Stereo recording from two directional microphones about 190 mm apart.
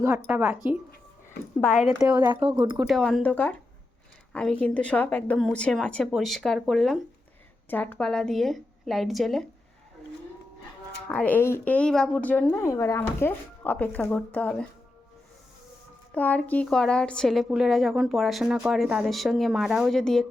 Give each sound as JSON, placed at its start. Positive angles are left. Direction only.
{"t": 0.3, "sound": "a woman's voice", "side_deg": -5}
{"t": 2.4, "sound": "speech", "side_deg": -20}
{"t": 2.8, "sound": "a woman's voice", "side_deg": 0}
{"t": 11.1, "sound": "a woman's voice", "side_deg": 10}
{"t": 16.1, "sound": "a woman's voice", "side_deg": 10}